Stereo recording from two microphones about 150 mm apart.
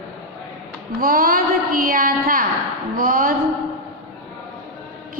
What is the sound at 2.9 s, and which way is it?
Speech, 70° right (ahead or behind).